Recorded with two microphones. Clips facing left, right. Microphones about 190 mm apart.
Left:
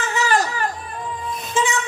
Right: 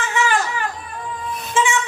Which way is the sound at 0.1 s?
35° left (ahead or behind).